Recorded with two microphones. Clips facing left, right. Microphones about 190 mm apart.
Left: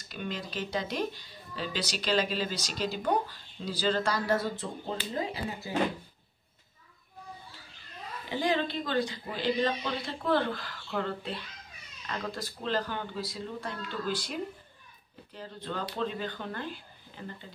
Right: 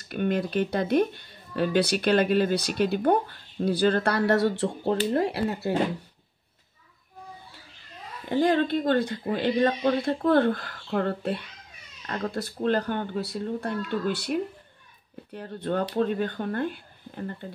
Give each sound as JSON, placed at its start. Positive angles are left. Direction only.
{"t": 0.1, "sound": "speech", "side_deg": -55}
{"t": 8.3, "sound": "speech", "side_deg": -50}